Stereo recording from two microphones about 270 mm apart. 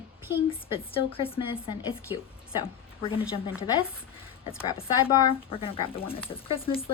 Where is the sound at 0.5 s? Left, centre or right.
Centre.